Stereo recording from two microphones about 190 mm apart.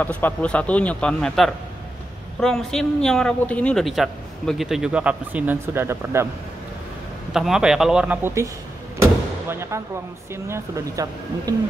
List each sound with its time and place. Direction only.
0.0 s a man's voice: 10° left (ahead or behind); by 6.2 s 10° right (ahead or behind)
7.3 s speech: 5° right (ahead or behind)
9.0 s a sound: 15° right (ahead or behind)
10.3 s speech: 15° right (ahead or behind)